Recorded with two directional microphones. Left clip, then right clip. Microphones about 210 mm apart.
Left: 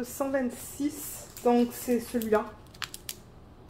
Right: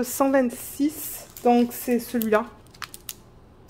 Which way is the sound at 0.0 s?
65° right (ahead or behind).